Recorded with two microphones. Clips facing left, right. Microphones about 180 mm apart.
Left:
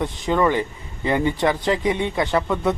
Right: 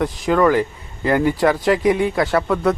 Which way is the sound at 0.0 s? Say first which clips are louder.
Right 4 dB; centre (ahead or behind).